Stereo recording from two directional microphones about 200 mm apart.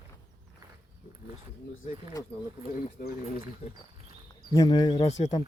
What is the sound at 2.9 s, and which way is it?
Speech, 45° left (ahead or behind).